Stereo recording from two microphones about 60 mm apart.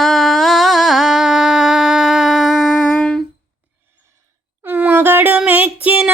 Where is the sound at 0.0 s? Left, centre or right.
Centre.